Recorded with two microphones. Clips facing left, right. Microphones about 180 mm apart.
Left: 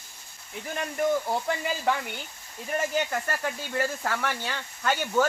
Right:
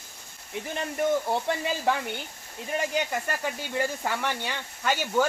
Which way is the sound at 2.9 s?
10° right (ahead or behind).